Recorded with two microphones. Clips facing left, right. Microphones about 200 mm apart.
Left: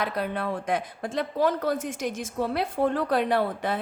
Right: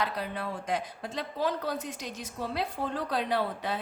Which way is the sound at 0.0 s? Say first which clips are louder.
Left 5 dB; 60° left (ahead or behind).